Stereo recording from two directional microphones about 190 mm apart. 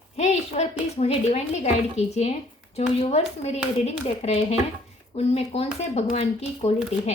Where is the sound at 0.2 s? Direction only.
35° left (ahead or behind).